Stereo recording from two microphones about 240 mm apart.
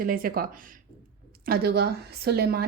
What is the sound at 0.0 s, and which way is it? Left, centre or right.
Speech, right.